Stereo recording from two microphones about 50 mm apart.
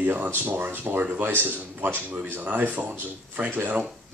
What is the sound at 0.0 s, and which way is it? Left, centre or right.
A man's voice, right.